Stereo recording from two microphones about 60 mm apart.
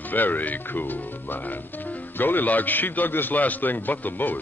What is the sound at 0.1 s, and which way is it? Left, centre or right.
A man's voice, left.